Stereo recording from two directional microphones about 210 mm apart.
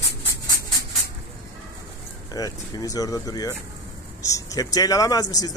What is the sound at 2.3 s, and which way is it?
A man's voice, 15° left (ahead or behind).